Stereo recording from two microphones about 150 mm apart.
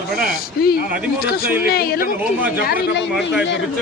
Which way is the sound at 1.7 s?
90° left.